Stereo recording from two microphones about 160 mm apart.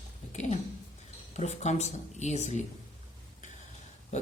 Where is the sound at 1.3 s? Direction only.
45° left (ahead or behind).